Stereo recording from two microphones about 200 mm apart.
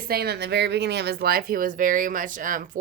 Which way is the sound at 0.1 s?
55° right (ahead or behind).